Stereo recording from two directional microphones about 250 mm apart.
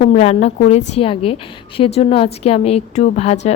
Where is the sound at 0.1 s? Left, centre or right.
Left.